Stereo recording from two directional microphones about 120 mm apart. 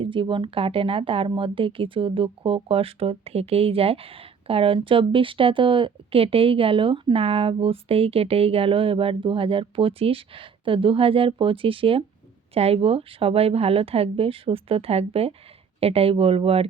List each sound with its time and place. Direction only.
0.0 s speech: 45° right (ahead or behind)